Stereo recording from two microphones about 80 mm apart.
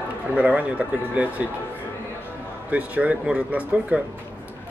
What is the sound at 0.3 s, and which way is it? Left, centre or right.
Speech, centre.